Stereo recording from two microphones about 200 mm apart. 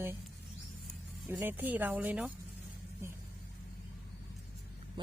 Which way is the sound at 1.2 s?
10° right (ahead or behind).